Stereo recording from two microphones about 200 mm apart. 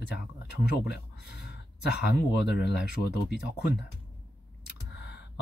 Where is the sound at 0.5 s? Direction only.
55° left (ahead or behind).